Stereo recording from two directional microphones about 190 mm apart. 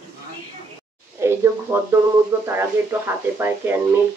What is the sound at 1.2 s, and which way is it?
Speech, 15° right (ahead or behind).